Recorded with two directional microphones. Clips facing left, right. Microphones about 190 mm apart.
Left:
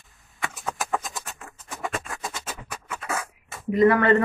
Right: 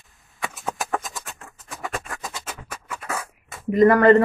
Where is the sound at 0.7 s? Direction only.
Centre (ahead or behind).